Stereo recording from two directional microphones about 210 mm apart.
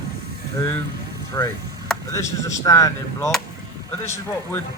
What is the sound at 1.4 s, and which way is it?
Speech, 15° left (ahead or behind).